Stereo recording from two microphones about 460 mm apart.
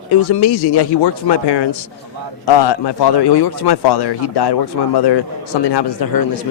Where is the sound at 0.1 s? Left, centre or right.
Left.